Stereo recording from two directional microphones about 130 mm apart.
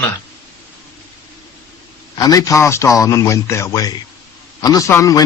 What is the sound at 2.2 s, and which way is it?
A man's voice, 25° left (ahead or behind).